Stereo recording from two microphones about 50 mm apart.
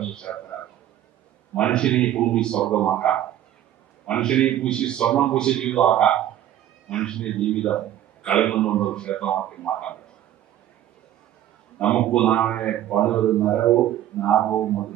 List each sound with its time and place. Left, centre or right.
0.0 s a sound: centre
1.5 s a man's voice: left
11.8 s a man's voice: centre